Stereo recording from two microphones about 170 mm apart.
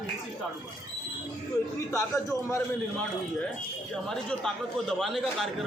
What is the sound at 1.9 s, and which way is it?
Speech, 15° left (ahead or behind).